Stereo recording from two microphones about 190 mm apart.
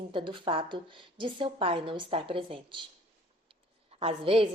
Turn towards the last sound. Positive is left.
turn(degrees=-30)  # may be behind; listen again after turning